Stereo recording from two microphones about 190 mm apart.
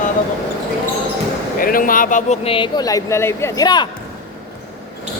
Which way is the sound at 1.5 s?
45° left (ahead or behind).